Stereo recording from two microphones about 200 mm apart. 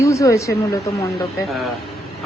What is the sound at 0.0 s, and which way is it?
Speech, 15° left (ahead or behind).